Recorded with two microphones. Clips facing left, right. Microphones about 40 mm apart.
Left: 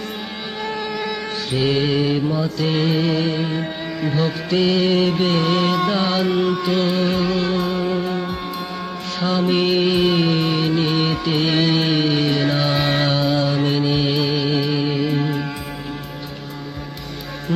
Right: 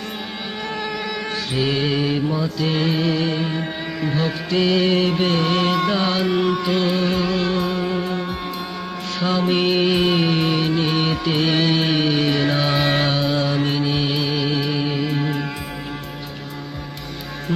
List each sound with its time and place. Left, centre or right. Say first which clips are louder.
0.6 s mantra: left 2 dB; centre
2.4 s music: left 1 dB; centre
5.3 s music: left 1 dB; centre
9.2 s music: left 1 dB; centre